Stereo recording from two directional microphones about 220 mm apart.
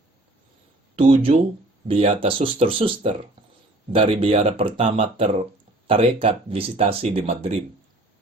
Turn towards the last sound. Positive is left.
turn(degrees=-25)  # may be behind; listen again after turning